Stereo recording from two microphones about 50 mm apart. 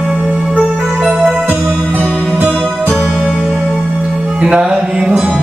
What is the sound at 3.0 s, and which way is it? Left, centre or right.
Music, centre.